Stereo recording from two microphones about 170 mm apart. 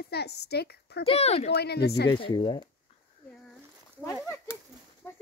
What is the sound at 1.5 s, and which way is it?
Speech, 70° left (ahead or behind).